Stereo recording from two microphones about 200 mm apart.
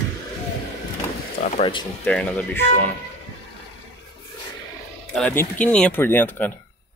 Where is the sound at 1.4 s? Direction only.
45° left (ahead or behind).